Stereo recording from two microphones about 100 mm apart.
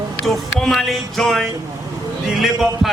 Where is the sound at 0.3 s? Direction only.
Centre (ahead or behind).